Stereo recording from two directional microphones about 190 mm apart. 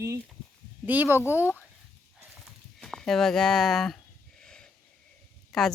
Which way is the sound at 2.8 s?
5° left (ahead or behind).